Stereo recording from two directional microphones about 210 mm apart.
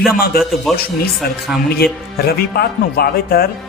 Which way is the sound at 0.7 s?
Centre (ahead or behind).